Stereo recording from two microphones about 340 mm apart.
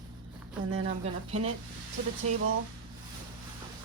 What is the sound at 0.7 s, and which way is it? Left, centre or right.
A woman's voice, centre.